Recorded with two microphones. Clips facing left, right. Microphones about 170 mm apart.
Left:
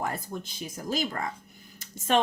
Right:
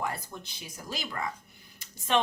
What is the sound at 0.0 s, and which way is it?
Speech, 45° left (ahead or behind).